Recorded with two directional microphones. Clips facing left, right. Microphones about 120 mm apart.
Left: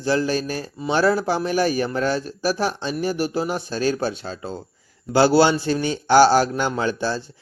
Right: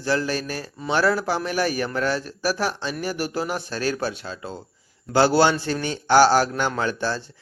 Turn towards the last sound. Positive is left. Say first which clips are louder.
# left 2 dB
turn(degrees=20)  # may be behind; listen again after turning